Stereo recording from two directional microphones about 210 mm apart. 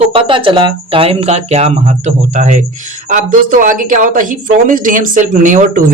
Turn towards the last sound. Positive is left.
turn(degrees=-35)  # may be behind; listen again after turning